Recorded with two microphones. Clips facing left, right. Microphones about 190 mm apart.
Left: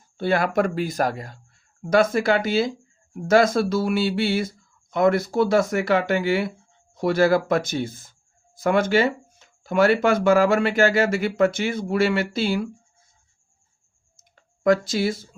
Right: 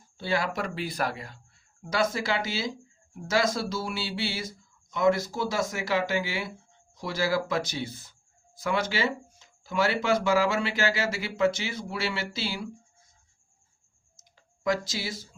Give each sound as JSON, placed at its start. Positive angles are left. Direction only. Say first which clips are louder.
{"t": 0.2, "sound": "speech", "louder": "left 8 dB", "side_deg": 55}
{"t": 1.9, "sound": "speech", "louder": "left 9 dB", "side_deg": 55}
{"t": 14.2, "sound": "clicking", "louder": "left 7 dB", "side_deg": 55}